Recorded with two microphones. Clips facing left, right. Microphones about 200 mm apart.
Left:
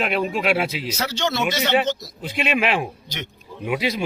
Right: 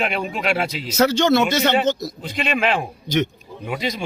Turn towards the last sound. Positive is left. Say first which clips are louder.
# left 2 dB
turn(degrees=5)  # may be behind; listen again after turning